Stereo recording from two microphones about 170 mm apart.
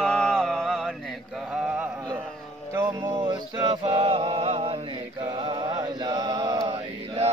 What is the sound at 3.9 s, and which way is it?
Chant, 35° right (ahead or behind).